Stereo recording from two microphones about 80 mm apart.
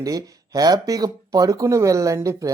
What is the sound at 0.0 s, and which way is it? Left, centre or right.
Speech, right.